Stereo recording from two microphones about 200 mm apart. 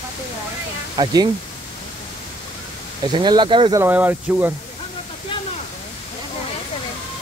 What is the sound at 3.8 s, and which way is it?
Speech, 10° right (ahead or behind).